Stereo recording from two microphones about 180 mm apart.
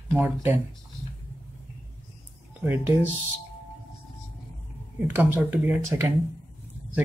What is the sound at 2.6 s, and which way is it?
Speech, 10° right (ahead or behind).